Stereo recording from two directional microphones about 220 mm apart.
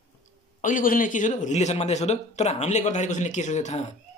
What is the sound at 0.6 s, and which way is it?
A man's voice, 40° left (ahead or behind).